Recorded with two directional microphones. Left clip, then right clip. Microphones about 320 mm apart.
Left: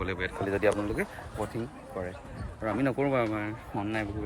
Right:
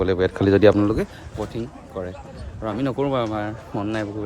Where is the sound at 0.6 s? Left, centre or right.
Right.